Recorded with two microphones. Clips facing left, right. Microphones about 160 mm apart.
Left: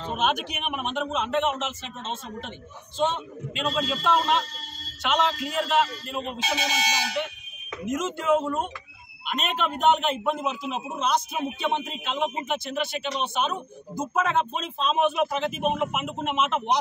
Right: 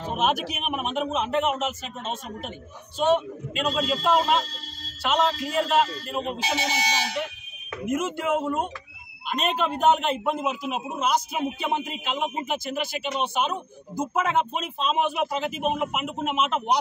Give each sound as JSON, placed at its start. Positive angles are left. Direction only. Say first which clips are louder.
{"t": 0.0, "sound": "a man's voice", "louder": "right 1 dB", "side_deg": -5}
{"t": 3.7, "sound": "a man's voice", "louder": "right 2 dB", "side_deg": -5}
{"t": 9.8, "sound": "a man's voice", "louder": "even", "side_deg": -5}